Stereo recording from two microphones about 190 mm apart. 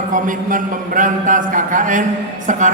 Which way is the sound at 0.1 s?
45° right (ahead or behind).